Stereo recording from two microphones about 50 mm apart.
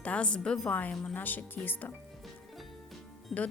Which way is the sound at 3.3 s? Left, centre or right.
Centre.